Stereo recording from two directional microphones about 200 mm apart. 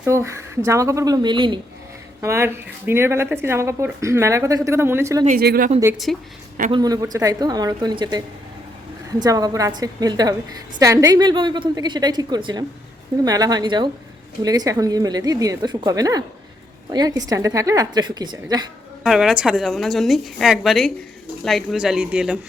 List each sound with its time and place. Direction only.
0.0 s speech: 15° right (ahead or behind)
2.2 s speech: 15° right (ahead or behind)
5.4 s speech: 50° right (ahead or behind)
6.1 s a woman's voice: centre (ahead or behind)
6.7 s a woman's voice: 20° right (ahead or behind)
19.0 s a woman's voice: centre (ahead or behind)